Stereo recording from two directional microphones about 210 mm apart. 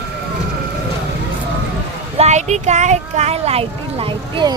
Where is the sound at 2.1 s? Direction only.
35° right (ahead or behind).